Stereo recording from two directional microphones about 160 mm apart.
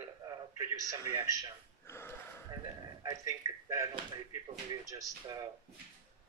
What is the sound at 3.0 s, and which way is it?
Speech, 20° right (ahead or behind).